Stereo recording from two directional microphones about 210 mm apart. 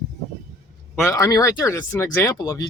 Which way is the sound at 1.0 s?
15° left (ahead or behind).